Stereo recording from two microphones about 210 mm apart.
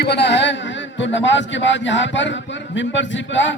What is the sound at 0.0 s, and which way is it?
A man's voice, 55° left (ahead or behind).